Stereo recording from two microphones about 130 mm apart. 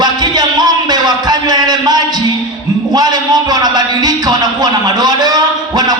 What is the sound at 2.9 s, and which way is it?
A man's voice, 30° right (ahead or behind).